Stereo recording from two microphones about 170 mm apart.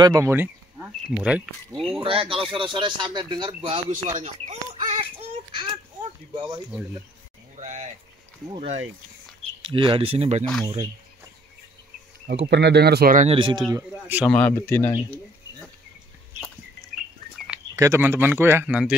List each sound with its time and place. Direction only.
0.0 s speech: 20° right (ahead or behind)
2.0 s speech: 30° right (ahead or behind)
3.9 s speech: 45° right (ahead or behind)
5.1 s a sound: 30° right (ahead or behind)
7.5 s a sound: 45° right (ahead or behind)
9.7 s speech: 30° right (ahead or behind)
10.6 s speech: 25° right (ahead or behind)
12.3 s speech: 80° right; by 13.3 s 55° right (ahead or behind)
13.3 s speech: 30° right (ahead or behind)
13.7 s speech: 15° right (ahead or behind)
14.2 s a man's voice: 10° left (ahead or behind)
16.3 s bird: centre (ahead or behind)
17.7 s speech: 15° right (ahead or behind)